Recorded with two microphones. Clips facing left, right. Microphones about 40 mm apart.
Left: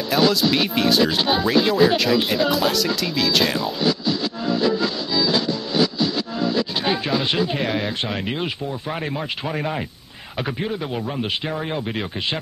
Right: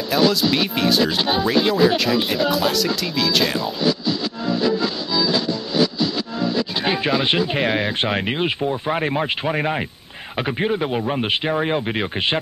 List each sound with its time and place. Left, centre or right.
0.1 s speech: centre
6.8 s speech: right
9.0 s speech: right